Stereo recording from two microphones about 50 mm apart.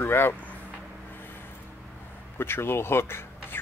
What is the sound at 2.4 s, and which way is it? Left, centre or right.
Speech, left.